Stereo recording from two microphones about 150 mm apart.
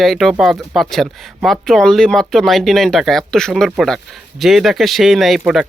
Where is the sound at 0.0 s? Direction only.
Centre (ahead or behind).